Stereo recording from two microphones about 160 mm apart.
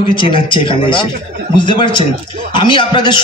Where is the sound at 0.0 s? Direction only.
30° left (ahead or behind).